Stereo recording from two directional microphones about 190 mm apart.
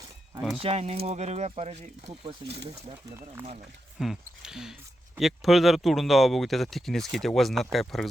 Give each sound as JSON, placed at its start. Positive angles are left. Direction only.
{"t": 0.6, "sound": "speech", "side_deg": -35}
{"t": 3.9, "sound": "speech", "side_deg": 0}